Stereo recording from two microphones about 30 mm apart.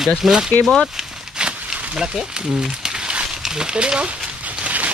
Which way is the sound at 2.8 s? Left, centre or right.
Right.